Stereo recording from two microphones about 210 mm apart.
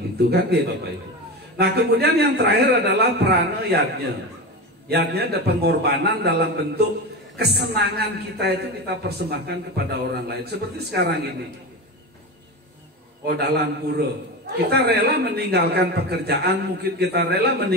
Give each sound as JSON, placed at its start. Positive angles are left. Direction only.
{"t": 1.6, "sound": "a man's voice", "side_deg": -50}
{"t": 13.2, "sound": "a man's voice", "side_deg": -50}